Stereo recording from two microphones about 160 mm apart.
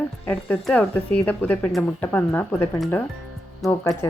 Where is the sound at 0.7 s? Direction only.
10° left (ahead or behind).